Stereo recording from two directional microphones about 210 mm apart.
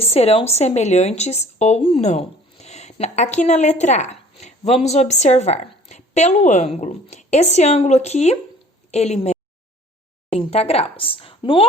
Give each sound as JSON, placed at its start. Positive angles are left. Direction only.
{"t": 0.0, "sound": "a woman's voice", "side_deg": 30}